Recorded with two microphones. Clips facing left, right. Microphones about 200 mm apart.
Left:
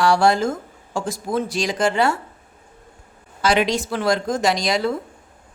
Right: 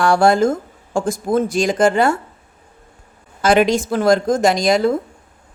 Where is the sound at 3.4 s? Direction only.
50° right (ahead or behind).